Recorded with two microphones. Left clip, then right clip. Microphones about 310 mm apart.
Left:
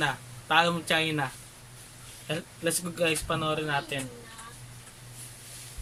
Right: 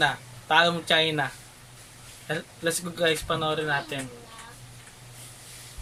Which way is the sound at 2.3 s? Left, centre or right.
Centre.